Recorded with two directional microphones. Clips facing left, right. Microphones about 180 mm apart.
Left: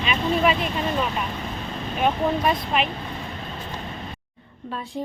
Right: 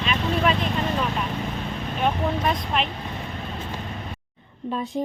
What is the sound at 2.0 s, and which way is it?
Speech, 5° left (ahead or behind).